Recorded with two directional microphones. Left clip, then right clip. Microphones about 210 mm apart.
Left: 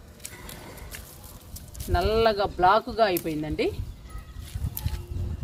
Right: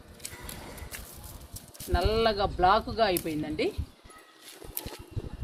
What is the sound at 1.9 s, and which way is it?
Speech, 30° left (ahead or behind).